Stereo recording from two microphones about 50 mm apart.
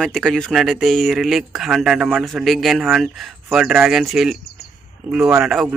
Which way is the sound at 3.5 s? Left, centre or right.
Centre.